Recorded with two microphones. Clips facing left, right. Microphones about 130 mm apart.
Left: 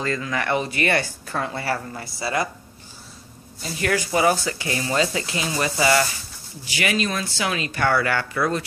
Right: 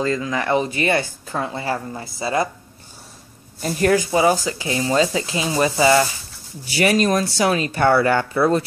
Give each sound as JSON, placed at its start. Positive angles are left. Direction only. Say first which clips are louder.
{"t": 0.0, "sound": "speech", "louder": "right 4 dB", "side_deg": -20}
{"t": 3.6, "sound": "speech", "louder": "right 7 dB", "side_deg": -45}
{"t": 3.9, "sound": "speech", "louder": "right 2 dB", "side_deg": -20}
{"t": 6.8, "sound": "speech", "louder": "right 7 dB", "side_deg": -40}